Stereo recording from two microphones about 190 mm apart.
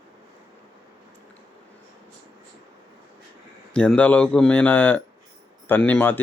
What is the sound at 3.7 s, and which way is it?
Speech, 5° left (ahead or behind).